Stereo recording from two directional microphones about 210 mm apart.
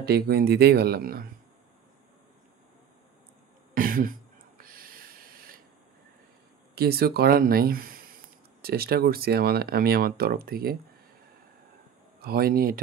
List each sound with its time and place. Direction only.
0.0 s speech: 50° right (ahead or behind)
3.7 s a sound: 40° right (ahead or behind)
6.7 s speech: 50° right (ahead or behind)
12.2 s speech: 45° right (ahead or behind)